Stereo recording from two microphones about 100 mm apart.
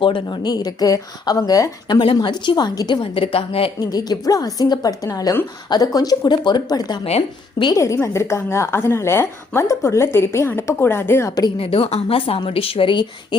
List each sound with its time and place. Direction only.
0.0 s speech: 50° left (ahead or behind)
2.2 s a woman's voice: 50° left (ahead or behind); by 3.7 s 65° left (ahead or behind)
3.8 s speech: 40° left (ahead or behind)
7.0 s a woman's voice: 75° left (ahead or behind)
8.0 s a woman's voice: 30° left (ahead or behind)
11.5 s a woman's voice: 70° left (ahead or behind); by 13.1 s 55° left (ahead or behind)